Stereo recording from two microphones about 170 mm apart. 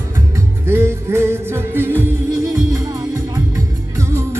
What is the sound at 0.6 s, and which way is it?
Music, 15° right (ahead or behind).